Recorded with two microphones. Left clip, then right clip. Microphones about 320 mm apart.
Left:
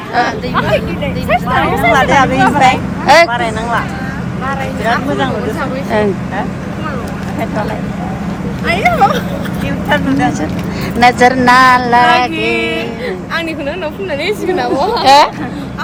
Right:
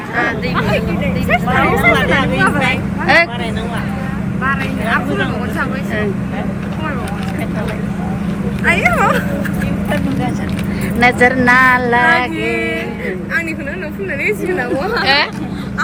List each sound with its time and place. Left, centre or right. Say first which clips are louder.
1.3 s speech: left 1 dB; centre
1.9 s speech: left 4 dB; left
8.6 s a woman's voice: left 2 dB; centre
11.0 s speech: left 3 dB; centre
14.3 s a woman's voice: left 3 dB; centre